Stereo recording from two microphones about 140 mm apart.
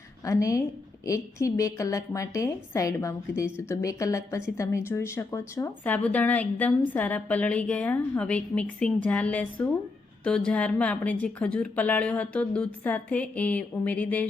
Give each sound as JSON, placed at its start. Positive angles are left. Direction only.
{"t": 0.3, "sound": "a woman's voice", "side_deg": 25}